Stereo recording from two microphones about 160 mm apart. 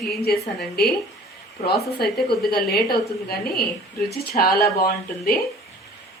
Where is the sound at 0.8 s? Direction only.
75° left (ahead or behind).